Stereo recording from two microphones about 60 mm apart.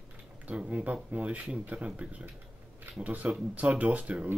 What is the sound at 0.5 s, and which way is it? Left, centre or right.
Speech, right.